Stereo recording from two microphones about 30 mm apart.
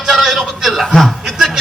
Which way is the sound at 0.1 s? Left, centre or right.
Centre.